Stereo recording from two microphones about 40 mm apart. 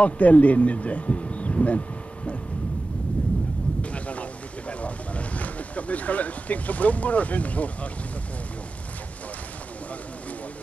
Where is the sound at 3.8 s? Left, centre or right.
Left.